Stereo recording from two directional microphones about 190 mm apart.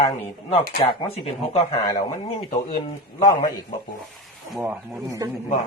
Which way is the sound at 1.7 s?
20° left (ahead or behind).